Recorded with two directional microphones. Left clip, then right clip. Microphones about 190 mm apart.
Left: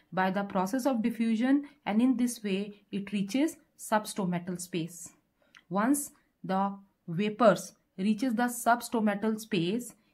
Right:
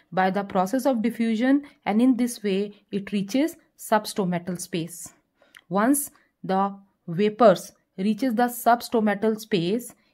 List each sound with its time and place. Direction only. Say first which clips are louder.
0.1 s speech: right 7 dB; 40° right (ahead or behind)